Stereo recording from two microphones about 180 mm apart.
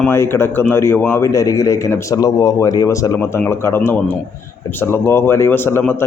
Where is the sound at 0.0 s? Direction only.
15° left (ahead or behind).